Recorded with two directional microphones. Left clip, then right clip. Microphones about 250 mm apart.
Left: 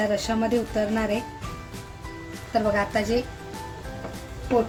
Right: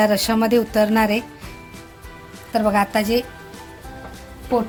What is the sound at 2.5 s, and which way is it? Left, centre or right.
Speech, right.